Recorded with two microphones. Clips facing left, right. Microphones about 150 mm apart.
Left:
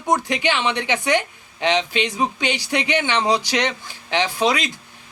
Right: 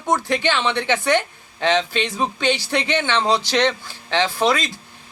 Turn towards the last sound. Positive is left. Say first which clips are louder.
# right 1 dB
turn(degrees=15)  # may be behind; listen again after turning